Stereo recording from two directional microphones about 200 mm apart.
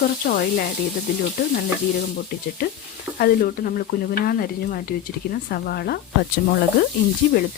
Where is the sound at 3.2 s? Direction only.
45° left (ahead or behind).